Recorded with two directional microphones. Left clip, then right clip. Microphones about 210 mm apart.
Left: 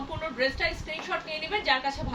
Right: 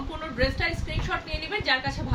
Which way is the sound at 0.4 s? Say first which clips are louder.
Right 1 dB; 10° right (ahead or behind).